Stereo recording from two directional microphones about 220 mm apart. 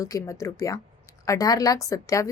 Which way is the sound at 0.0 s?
15° left (ahead or behind).